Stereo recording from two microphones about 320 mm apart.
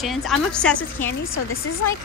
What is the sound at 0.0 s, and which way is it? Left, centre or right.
A woman's voice, centre.